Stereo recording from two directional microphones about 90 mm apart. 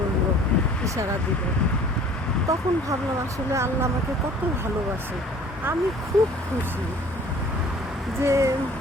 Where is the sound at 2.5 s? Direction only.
40° right (ahead or behind).